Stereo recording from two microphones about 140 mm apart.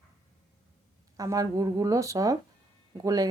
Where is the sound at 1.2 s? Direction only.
25° right (ahead or behind).